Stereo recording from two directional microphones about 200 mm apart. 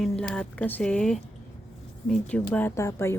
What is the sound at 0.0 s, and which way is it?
Speech, 5° left (ahead or behind).